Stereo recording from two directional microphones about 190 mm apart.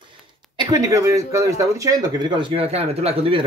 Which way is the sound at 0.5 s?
15° right (ahead or behind).